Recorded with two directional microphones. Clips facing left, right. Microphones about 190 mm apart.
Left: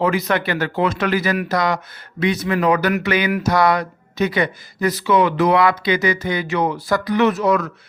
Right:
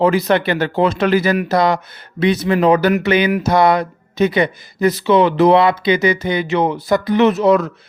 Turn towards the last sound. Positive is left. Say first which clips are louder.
# right 4 dB
turn(degrees=-25)  # may be behind; listen again after turning